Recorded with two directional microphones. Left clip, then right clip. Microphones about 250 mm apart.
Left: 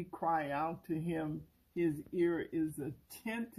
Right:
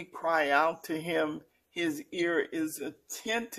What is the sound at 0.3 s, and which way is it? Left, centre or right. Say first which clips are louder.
Speech: right 10 dB; right.